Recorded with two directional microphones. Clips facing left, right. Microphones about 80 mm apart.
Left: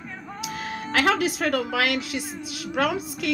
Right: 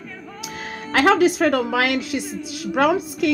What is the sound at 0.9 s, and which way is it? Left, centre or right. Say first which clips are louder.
A woman's voice: right 7 dB; right.